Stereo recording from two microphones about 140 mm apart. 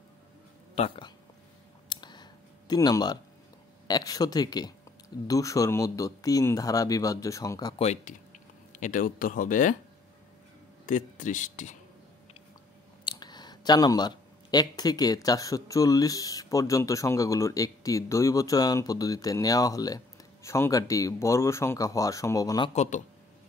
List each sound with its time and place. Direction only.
0.7 s speech: 45° left (ahead or behind)
1.9 s a sound: 30° left (ahead or behind)
2.7 s speech: 30° left (ahead or behind)
7.8 s speech: 60° left (ahead or behind)
10.9 s speech: 70° left (ahead or behind)
13.0 s speech: 30° left (ahead or behind)
22.8 s speech: 65° left (ahead or behind)